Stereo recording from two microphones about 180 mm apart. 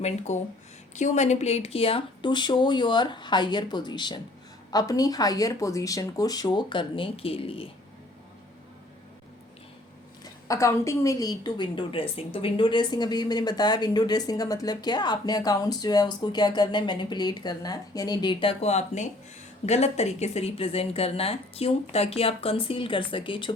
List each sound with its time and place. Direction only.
0.3 s a woman's voice: 40° left (ahead or behind)
10.2 s a woman's voice: 15° left (ahead or behind)